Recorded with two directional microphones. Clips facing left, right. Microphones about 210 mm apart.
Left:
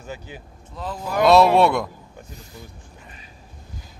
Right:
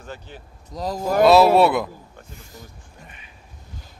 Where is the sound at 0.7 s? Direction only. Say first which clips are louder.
Right 6 dB; 40° right (ahead or behind).